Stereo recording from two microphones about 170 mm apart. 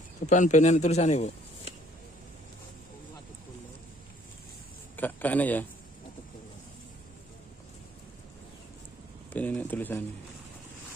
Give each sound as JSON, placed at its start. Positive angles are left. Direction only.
{"t": 0.3, "sound": "a man's voice", "side_deg": 45}
{"t": 4.9, "sound": "a man's voice", "side_deg": 10}
{"t": 9.3, "sound": "a man's voice", "side_deg": 10}